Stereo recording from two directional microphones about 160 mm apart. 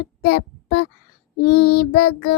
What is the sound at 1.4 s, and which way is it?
Child singing, 90° left.